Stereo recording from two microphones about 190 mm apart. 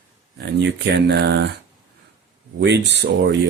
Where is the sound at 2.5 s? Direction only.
65° right (ahead or behind).